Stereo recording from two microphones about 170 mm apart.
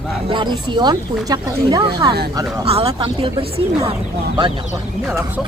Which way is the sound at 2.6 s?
35° right (ahead or behind).